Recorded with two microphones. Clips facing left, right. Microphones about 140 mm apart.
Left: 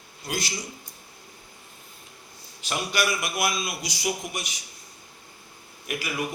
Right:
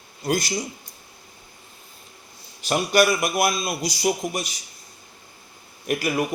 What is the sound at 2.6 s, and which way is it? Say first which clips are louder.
A man's voice: right 8 dB; 45° right (ahead or behind).